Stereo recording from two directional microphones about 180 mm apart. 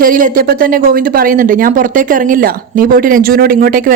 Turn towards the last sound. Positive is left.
turn(degrees=-50)  # may be behind; listen again after turning